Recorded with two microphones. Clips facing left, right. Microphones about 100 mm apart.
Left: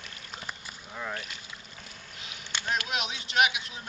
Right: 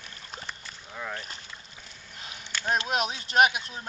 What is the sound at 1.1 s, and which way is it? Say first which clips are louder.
Speech: even; 35° right (ahead or behind).